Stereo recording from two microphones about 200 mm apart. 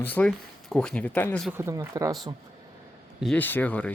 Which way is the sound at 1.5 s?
10° right (ahead or behind).